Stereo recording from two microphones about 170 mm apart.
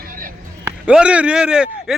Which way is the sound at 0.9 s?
5° right (ahead or behind).